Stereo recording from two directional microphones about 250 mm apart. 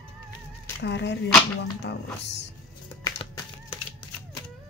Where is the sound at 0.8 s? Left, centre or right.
Left.